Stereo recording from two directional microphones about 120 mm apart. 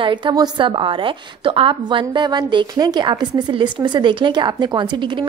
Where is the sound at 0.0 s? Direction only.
40° right (ahead or behind).